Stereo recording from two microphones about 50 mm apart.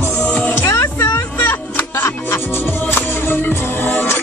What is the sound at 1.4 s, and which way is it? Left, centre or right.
Music, left.